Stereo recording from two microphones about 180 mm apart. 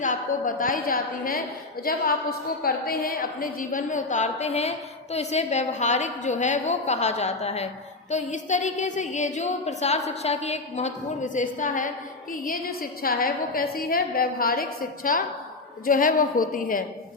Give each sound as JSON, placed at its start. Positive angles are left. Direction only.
{"t": 0.0, "sound": "a woman's voice", "side_deg": 45}